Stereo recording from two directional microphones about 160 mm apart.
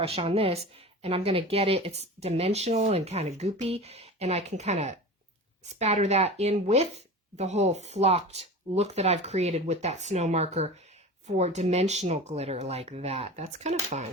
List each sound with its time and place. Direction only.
0.0 s speech: 40° right (ahead or behind)